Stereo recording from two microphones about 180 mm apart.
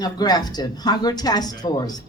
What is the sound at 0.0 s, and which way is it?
Speech, 20° left (ahead or behind).